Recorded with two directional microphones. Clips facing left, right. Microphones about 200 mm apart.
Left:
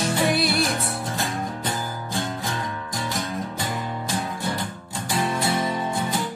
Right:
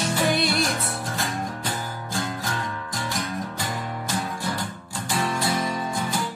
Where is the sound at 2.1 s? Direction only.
25° left (ahead or behind).